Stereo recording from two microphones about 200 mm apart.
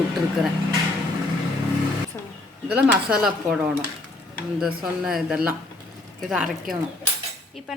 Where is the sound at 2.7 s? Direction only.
5° right (ahead or behind).